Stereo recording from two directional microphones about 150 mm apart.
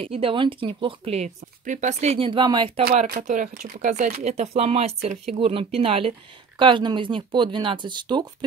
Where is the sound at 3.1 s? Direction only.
65° right (ahead or behind).